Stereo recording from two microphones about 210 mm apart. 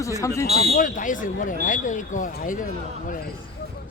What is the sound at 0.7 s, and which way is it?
Speech, 40° left (ahead or behind).